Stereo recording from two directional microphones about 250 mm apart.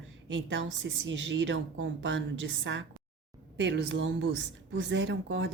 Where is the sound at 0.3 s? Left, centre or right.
Right.